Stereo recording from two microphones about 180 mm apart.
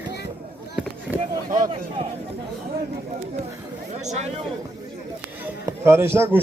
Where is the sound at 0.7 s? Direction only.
5° right (ahead or behind).